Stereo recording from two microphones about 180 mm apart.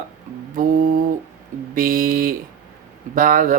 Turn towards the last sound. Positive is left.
turn(degrees=-50)  # may be behind; listen again after turning